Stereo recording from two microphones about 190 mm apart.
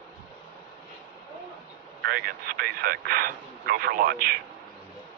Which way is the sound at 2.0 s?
55° right (ahead or behind).